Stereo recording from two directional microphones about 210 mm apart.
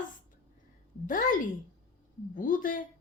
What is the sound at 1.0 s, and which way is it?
A woman's voice, 40° left (ahead or behind).